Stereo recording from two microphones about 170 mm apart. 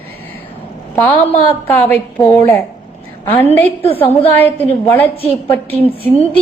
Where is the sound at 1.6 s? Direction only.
10° left (ahead or behind).